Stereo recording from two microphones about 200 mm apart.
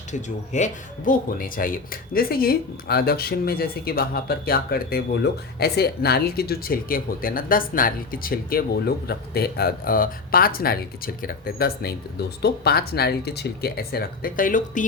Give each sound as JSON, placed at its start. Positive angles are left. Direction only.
{"t": 0.1, "sound": "speech", "side_deg": 35}